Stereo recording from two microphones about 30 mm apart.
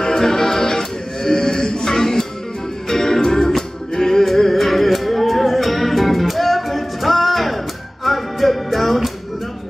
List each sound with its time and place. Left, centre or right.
0.0 s music: centre